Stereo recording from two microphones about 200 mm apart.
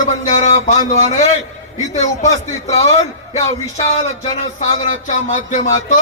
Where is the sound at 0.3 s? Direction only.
35° left (ahead or behind).